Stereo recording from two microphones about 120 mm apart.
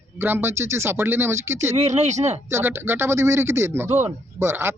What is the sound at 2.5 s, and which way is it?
Speech, 20° right (ahead or behind).